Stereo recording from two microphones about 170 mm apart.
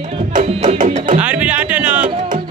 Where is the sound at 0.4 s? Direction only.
40° right (ahead or behind).